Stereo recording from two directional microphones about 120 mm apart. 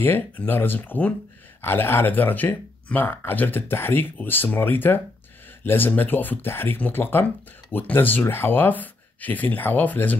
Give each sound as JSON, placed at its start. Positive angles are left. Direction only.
{"t": 0.0, "sound": "speech", "side_deg": 15}